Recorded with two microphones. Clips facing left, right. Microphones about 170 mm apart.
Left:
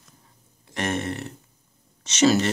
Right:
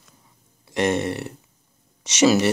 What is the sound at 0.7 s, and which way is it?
Burping, 15° right (ahead or behind).